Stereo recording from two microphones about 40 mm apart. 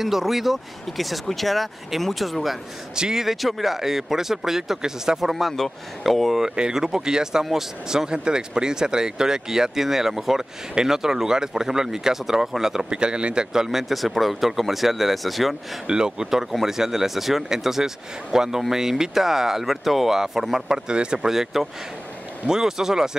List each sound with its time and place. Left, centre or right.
0.0 s speech: centre
3.0 s speech: centre
5.3 s speech: centre
6.7 s speech: centre
13.0 s speech: right; by 15.5 s centre
15.9 s speech: centre
20.9 s speech: right
21.3 s speech: centre